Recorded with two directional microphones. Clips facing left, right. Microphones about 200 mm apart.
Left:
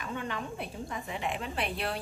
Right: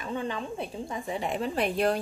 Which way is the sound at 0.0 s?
30° right (ahead or behind).